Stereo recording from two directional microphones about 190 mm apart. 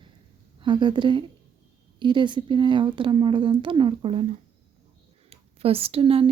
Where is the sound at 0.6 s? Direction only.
25° right (ahead or behind).